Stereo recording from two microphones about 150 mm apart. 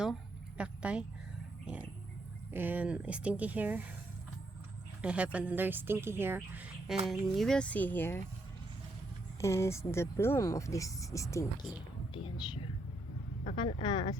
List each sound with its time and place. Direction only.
0.0 s a sound: 5° right (ahead or behind)
2.5 s speech: 15° right (ahead or behind)
5.0 s speech: 10° right (ahead or behind); by 8.2 s 15° left (ahead or behind)
9.4 s speech: 20° left (ahead or behind)
12.1 s whispering: 30° left (ahead or behind)
13.6 s a woman's voice: 30° left (ahead or behind)